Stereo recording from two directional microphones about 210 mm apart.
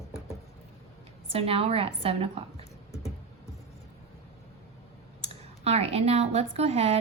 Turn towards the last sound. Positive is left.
turn(degrees=-30)  # may be behind; listen again after turning